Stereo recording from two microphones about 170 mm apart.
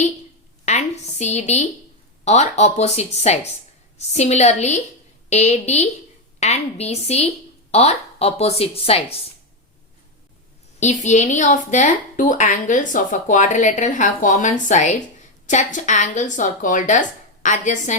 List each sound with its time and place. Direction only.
0.6 s a sound: 40° left (ahead or behind)
2.2 s speech: 40° left (ahead or behind)
10.8 s a woman's voice: 45° left (ahead or behind)